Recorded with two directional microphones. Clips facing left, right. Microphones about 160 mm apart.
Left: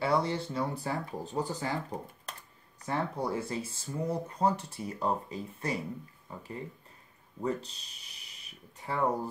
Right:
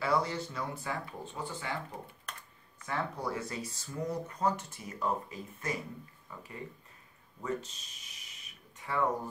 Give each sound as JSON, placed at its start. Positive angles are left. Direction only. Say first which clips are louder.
{"t": 0.0, "sound": "speech", "louder": "left 2 dB", "side_deg": 30}
{"t": 2.8, "sound": "speech", "louder": "left 3 dB", "side_deg": 30}